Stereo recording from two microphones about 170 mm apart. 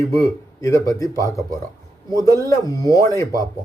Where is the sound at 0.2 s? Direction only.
20° left (ahead or behind).